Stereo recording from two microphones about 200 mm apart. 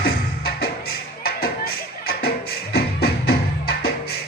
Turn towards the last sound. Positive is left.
turn(degrees=50)  # may be behind; listen again after turning